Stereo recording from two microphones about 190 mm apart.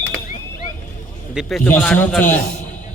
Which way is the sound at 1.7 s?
10° left (ahead or behind).